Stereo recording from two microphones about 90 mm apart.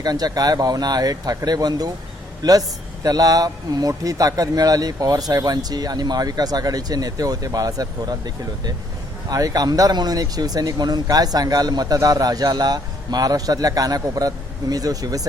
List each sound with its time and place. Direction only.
0.0 s a man's voice: 45° right (ahead or behind)